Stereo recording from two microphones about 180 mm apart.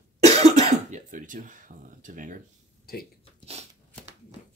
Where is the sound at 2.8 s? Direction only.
55° left (ahead or behind).